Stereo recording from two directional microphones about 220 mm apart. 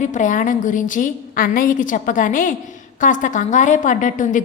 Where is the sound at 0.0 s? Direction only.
35° left (ahead or behind).